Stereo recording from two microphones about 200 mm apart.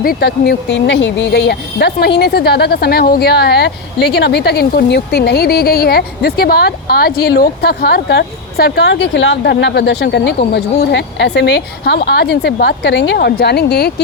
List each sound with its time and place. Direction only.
0.0 s speech: 50° left (ahead or behind)